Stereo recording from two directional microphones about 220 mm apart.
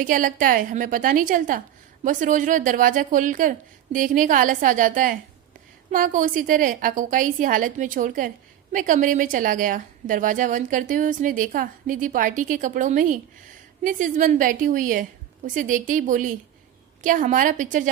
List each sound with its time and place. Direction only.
0.0 s a woman's voice: 40° right (ahead or behind)